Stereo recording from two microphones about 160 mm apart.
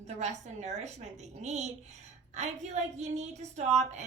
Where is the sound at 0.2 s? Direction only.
45° right (ahead or behind).